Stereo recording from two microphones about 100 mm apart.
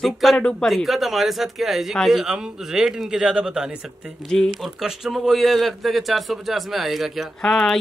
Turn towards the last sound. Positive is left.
turn(degrees=5)  # may be behind; listen again after turning